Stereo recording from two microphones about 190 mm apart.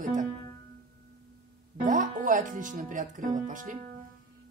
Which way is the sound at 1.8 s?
45° right (ahead or behind).